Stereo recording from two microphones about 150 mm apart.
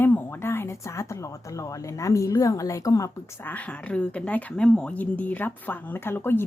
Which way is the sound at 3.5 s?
10° left (ahead or behind).